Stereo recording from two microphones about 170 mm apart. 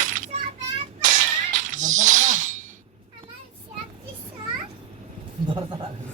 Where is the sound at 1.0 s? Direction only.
45° right (ahead or behind).